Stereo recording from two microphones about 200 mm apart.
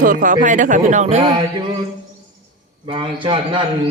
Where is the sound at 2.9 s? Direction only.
25° right (ahead or behind).